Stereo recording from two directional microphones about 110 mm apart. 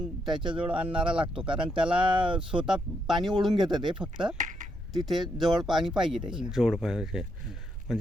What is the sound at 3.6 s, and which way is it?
Speech, 40° right (ahead or behind).